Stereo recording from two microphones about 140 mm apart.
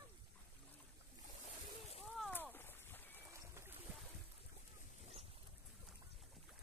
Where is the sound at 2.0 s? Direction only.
Centre (ahead or behind).